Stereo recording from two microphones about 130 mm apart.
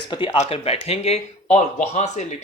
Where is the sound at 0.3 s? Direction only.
55° left (ahead or behind).